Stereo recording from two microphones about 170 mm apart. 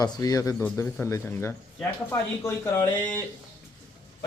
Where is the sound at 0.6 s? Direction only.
10° left (ahead or behind).